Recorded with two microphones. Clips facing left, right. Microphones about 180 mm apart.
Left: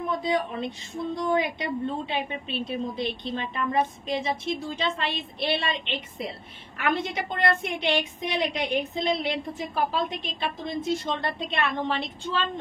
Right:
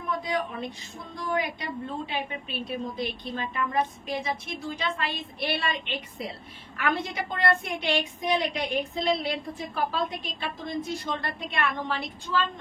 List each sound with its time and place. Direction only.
0.2 s a woman's voice: 25° left (ahead or behind)